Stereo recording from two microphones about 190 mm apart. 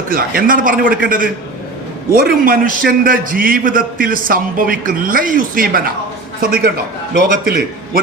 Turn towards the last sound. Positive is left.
turn(degrees=-50)  # may be behind; listen again after turning